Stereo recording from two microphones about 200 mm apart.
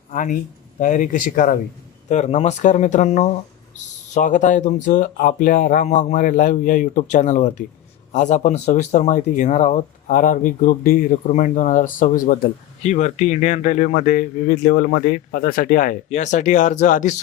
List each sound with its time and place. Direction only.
0.1 s speech: 40° left (ahead or behind)